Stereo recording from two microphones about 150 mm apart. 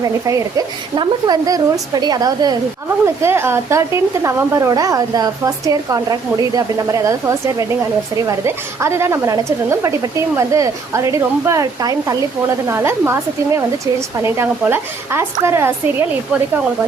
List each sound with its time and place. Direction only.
0.0 s a woman's voice: 25° right (ahead or behind)